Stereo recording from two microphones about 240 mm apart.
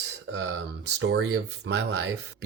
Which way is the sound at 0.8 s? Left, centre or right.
Right.